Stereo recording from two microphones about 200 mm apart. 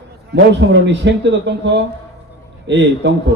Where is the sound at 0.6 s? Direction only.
75° right (ahead or behind).